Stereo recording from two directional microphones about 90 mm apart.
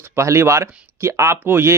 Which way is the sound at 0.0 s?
35° right (ahead or behind).